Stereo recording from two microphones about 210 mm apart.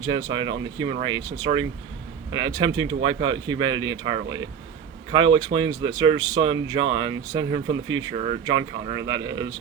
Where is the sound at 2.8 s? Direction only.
70° right (ahead or behind).